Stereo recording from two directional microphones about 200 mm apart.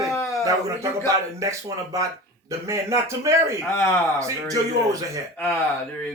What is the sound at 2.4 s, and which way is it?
A man's voice, 15° right (ahead or behind).